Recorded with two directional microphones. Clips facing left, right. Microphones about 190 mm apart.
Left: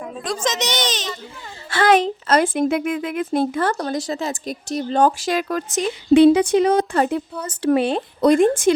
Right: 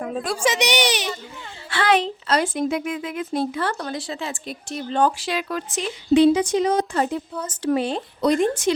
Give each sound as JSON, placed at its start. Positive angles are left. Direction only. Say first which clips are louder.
{"t": 0.2, "sound": "speech", "louder": "right 1 dB", "side_deg": -10}
{"t": 1.7, "sound": "speech", "louder": "left 4 dB", "side_deg": 45}